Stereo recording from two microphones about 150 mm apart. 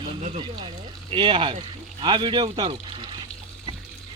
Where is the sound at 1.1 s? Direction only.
35° right (ahead or behind).